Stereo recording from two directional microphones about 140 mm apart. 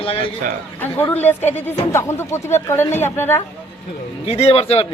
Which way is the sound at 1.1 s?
15° left (ahead or behind).